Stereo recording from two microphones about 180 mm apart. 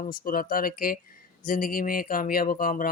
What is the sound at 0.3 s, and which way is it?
Speech, 50° left (ahead or behind).